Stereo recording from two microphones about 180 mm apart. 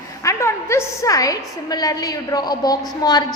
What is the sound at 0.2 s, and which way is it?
A woman's voice, 15° left (ahead or behind).